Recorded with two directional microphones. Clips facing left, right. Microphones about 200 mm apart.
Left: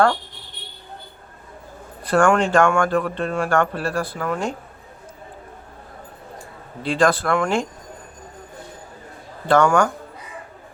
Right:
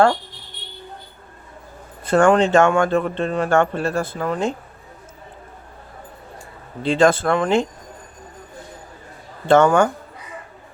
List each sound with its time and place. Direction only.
2.0 s speech: 20° right (ahead or behind)
6.8 s speech: 25° right (ahead or behind)
9.5 s speech: 25° right (ahead or behind)